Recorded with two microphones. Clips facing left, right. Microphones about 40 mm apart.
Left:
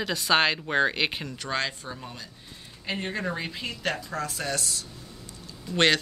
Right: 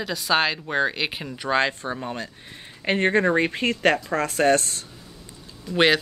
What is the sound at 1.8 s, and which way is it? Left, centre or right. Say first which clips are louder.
Speech: right 9 dB; right.